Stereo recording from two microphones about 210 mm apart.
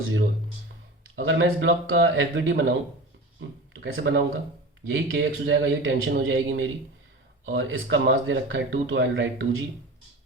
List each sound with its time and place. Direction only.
1.1 s speech: 70° right (ahead or behind)
3.8 s speech: 70° right (ahead or behind)